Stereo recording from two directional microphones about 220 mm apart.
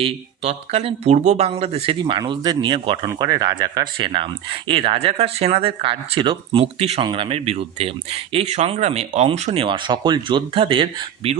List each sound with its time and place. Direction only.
0.0 s speech: 25° right (ahead or behind)